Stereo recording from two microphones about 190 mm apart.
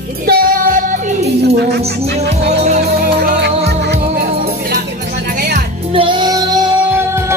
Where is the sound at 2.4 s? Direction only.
40° right (ahead or behind).